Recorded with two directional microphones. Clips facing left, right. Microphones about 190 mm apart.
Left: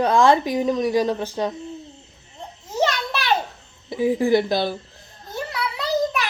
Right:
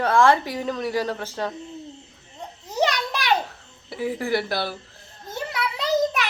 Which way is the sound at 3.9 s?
15° left (ahead or behind).